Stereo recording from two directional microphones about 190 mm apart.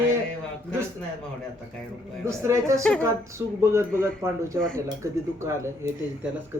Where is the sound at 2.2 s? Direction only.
15° right (ahead or behind).